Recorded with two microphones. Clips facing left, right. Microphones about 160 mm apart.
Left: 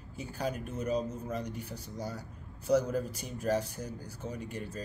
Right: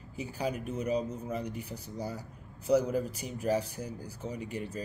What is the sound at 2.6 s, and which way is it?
A man's voice, 10° right (ahead or behind).